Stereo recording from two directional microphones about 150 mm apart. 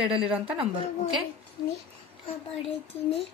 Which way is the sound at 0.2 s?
10° right (ahead or behind).